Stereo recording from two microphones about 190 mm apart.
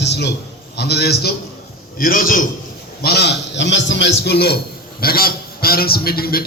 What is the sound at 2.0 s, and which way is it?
Speech, 50° left (ahead or behind).